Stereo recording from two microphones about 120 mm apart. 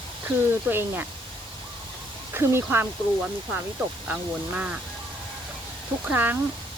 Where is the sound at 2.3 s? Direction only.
20° right (ahead or behind).